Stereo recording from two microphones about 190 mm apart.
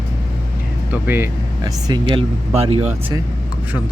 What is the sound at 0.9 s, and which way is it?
Speech, 10° right (ahead or behind).